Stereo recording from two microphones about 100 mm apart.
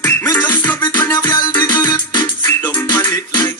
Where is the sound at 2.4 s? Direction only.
20° left (ahead or behind).